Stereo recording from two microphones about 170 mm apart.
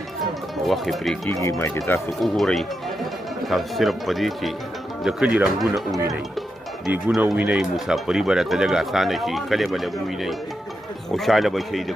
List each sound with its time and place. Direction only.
0.7 s speech: centre (ahead or behind)
1.3 s speech: 15° left (ahead or behind)
2.2 s speech: centre (ahead or behind)